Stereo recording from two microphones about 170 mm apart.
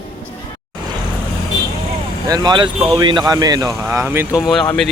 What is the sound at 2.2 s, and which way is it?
Speech, 25° right (ahead or behind).